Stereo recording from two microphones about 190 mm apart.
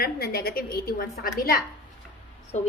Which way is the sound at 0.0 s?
55° left (ahead or behind).